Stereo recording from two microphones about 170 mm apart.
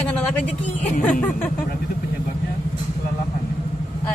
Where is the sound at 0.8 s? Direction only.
50° left (ahead or behind).